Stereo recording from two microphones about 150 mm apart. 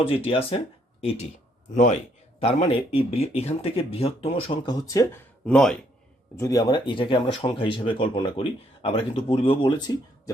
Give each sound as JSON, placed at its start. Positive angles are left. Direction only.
{"t": 0.3, "sound": "speech", "side_deg": 40}
{"t": 2.4, "sound": "speech", "side_deg": 40}
{"t": 5.5, "sound": "speech", "side_deg": 5}
{"t": 6.3, "sound": "speech", "side_deg": 20}